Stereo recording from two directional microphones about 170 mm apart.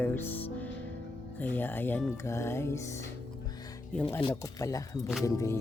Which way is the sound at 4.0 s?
15° left (ahead or behind).